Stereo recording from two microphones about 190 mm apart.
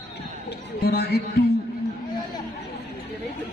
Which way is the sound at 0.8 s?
55° left (ahead or behind).